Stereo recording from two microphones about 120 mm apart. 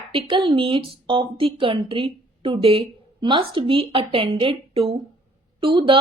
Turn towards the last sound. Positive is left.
turn(degrees=-45)  # may be behind; listen again after turning